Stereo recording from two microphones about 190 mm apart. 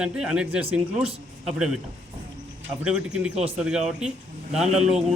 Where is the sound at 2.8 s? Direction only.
5° right (ahead or behind).